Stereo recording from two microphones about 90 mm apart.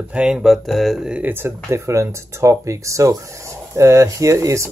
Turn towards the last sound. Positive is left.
turn(degrees=-35)  # may be behind; listen again after turning